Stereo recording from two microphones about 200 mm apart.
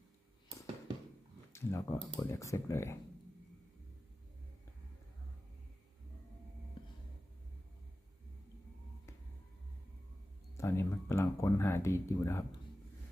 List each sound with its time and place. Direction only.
1.5 s speech: 15° left (ahead or behind)
6.8 s a sound: 25° left (ahead or behind)
10.6 s speech: 15° left (ahead or behind)